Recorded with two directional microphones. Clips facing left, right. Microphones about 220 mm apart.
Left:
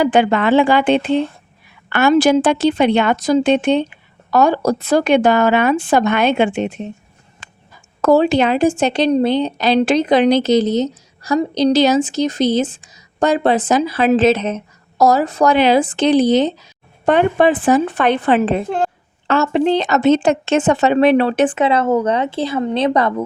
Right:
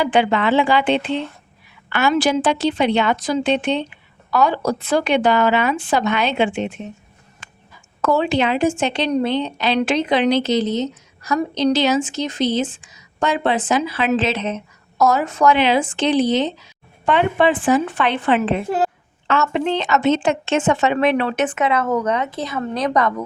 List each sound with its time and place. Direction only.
0.0 s a woman's voice: 45° left (ahead or behind)